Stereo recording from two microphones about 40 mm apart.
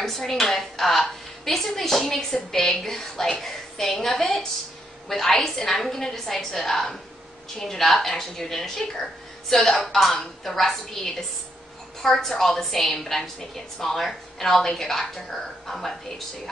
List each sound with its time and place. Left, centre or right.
0.0 s a woman's voice: centre